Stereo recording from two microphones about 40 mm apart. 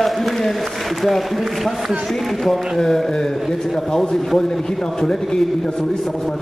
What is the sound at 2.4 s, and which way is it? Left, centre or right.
A man's voice, centre.